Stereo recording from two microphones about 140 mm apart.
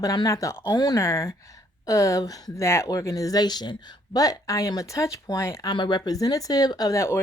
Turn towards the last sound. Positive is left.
turn(degrees=20)  # may be behind; listen again after turning